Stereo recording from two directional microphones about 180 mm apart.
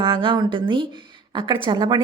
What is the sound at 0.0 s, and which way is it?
A woman's voice, 30° right (ahead or behind).